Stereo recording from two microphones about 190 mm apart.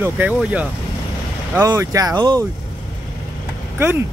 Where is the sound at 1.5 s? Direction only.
15° right (ahead or behind).